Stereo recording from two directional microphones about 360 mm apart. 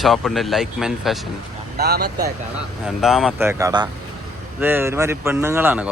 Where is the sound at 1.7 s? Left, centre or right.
Right.